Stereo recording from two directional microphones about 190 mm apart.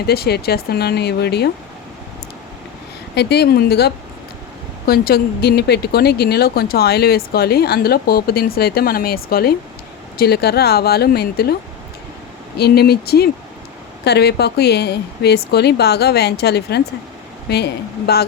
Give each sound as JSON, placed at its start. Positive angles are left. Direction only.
{"t": 0.0, "sound": "speech", "side_deg": 55}
{"t": 3.2, "sound": "speech", "side_deg": 60}
{"t": 12.5, "sound": "speech", "side_deg": 55}